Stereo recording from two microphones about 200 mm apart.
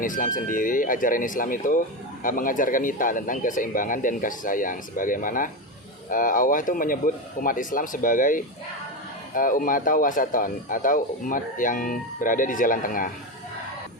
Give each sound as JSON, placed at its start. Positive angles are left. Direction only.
{"t": 0.0, "sound": "speech", "side_deg": 40}